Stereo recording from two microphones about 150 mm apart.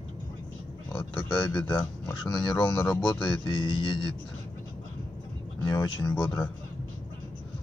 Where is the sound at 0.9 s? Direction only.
5° left (ahead or behind).